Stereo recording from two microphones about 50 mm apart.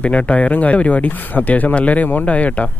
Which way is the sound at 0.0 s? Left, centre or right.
Left.